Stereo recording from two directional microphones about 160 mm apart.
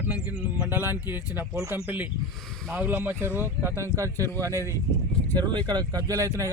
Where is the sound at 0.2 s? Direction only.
10° right (ahead or behind).